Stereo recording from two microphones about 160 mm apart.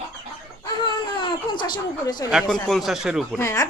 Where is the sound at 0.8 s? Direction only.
30° left (ahead or behind).